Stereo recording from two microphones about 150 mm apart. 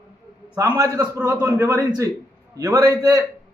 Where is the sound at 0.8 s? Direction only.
20° right (ahead or behind).